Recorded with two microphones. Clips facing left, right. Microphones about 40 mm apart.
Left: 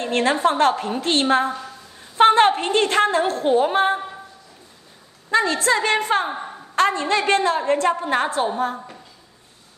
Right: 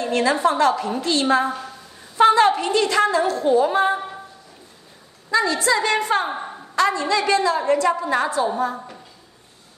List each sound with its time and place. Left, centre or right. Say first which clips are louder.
0.0 s a woman's voice: even; left
1.5 s a woman's voice: right 1 dB; centre
2.1 s a woman's voice: even; left
5.3 s a woman's voice: even; left
6.2 s a sound: right 1 dB; centre
6.7 s a woman's voice: even; left